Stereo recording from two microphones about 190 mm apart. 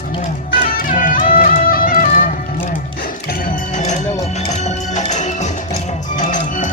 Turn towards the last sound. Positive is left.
turn(degrees=40)  # may be behind; listen again after turning